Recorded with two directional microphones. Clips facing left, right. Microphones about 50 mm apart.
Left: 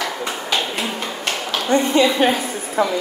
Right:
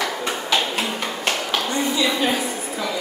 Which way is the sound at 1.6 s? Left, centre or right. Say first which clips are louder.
Left 8 dB; left.